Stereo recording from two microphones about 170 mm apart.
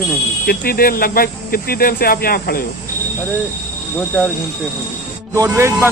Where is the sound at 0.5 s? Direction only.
60° left (ahead or behind).